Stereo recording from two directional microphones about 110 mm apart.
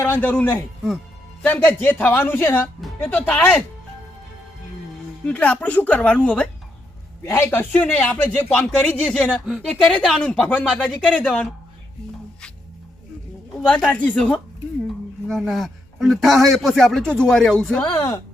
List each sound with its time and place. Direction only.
0.0 s speech: 20° left (ahead or behind)
5.2 s speech: 15° left (ahead or behind)
7.3 s speech: 20° left (ahead or behind)
13.7 s speech: 10° left (ahead or behind)